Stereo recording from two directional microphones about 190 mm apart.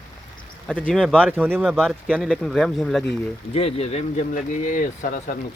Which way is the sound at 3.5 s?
30° left (ahead or behind).